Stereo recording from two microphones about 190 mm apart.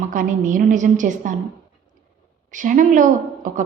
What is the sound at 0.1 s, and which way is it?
A woman's voice, 45° right (ahead or behind).